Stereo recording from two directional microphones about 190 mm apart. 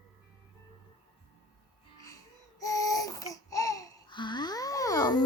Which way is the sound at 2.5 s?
15° left (ahead or behind).